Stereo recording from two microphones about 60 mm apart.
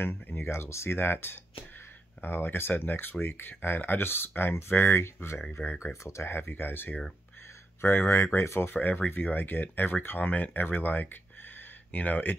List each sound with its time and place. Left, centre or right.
0.0 s speech: left
0.5 s speech: left
8.7 s speech: left